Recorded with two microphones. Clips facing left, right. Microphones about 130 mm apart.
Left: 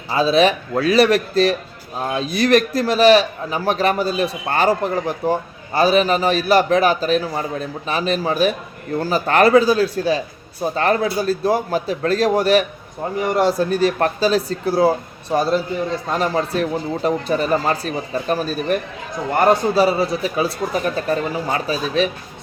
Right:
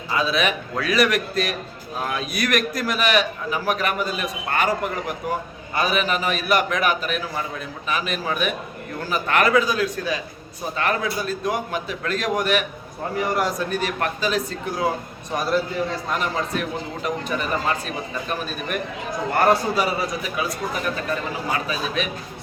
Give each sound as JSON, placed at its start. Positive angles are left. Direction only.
{"t": 0.1, "sound": "a man's voice", "side_deg": 30}